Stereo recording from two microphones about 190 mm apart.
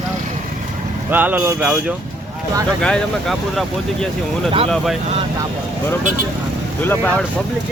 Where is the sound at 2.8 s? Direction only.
5° left (ahead or behind).